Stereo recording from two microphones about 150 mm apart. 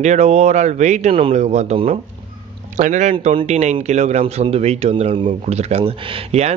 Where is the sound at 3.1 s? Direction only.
40° right (ahead or behind).